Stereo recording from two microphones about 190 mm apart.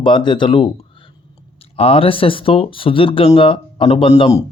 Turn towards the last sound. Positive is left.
turn(degrees=30)  # may be behind; listen again after turning